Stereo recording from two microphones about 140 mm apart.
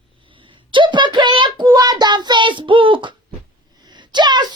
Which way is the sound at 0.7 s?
35° right (ahead or behind).